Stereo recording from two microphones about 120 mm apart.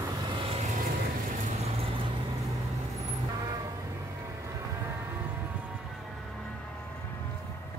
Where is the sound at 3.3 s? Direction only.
35° right (ahead or behind).